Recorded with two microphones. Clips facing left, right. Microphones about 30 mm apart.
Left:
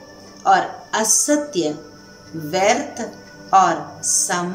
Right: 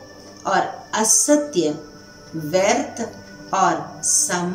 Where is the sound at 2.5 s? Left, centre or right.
Centre.